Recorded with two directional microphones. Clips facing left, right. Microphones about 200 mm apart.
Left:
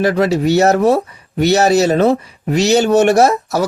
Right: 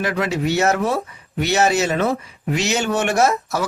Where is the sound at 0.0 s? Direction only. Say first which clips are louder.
Left 7 dB; 35° left (ahead or behind).